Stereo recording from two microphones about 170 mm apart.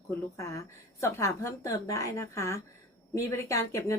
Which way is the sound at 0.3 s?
15° left (ahead or behind).